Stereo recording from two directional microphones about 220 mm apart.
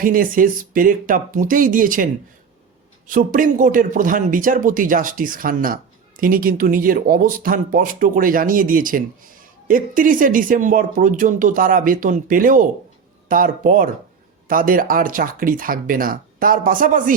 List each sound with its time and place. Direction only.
0.0 s speech: 40° right (ahead or behind)
3.1 s speech: 40° right (ahead or behind)